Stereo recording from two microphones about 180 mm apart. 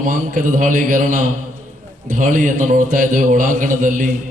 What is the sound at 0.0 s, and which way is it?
A man's voice, 50° right (ahead or behind).